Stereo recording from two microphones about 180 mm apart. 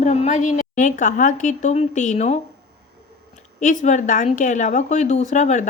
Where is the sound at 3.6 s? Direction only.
45° left (ahead or behind).